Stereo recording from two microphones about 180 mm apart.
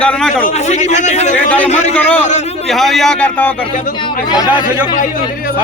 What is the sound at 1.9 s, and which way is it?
Speech, 10° left (ahead or behind).